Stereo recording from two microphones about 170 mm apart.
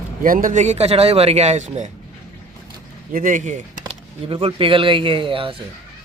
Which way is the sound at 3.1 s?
50° right (ahead or behind).